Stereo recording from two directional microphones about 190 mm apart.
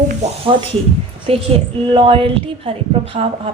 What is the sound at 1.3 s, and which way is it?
Speech, 30° right (ahead or behind).